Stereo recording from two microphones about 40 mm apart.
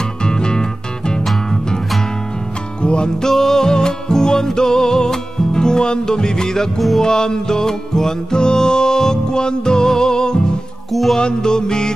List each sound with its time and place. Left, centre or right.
0.2 s music: centre
2.8 s music: left
3.2 s music: centre
10.9 s music: centre
11.1 s music: centre